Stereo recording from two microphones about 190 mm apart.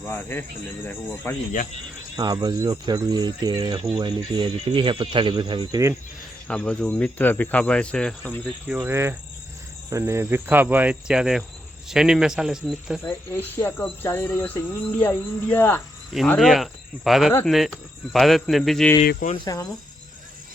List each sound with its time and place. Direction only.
0.0 s speech: 10° left (ahead or behind)
2.1 s speech: 20° right (ahead or behind)
6.5 s speech: 5° left (ahead or behind)
8.6 s cricket: 10° right (ahead or behind)
11.9 s speech: 5° right (ahead or behind)
13.1 s speech: 10° left (ahead or behind)
19.5 s speech: 20° left (ahead or behind)